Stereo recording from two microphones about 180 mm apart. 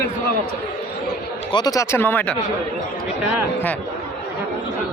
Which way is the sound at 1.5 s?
25° left (ahead or behind).